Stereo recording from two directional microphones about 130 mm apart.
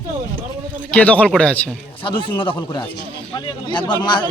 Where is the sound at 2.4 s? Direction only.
40° left (ahead or behind).